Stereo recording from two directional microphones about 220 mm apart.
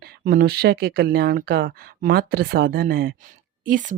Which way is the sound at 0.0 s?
45° right (ahead or behind).